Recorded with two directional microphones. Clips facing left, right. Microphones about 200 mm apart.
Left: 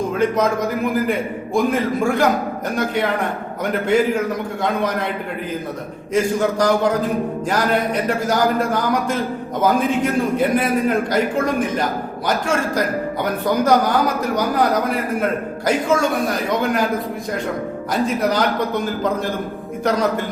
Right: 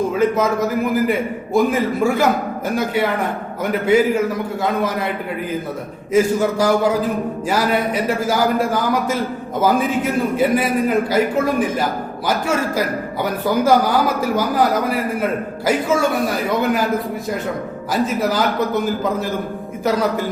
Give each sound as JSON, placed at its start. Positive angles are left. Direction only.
{"t": 0.1, "sound": "a man's voice", "side_deg": -5}
{"t": 1.5, "sound": "a man's voice", "side_deg": -5}
{"t": 6.1, "sound": "a man's voice", "side_deg": -5}
{"t": 17.9, "sound": "a man's voice", "side_deg": -5}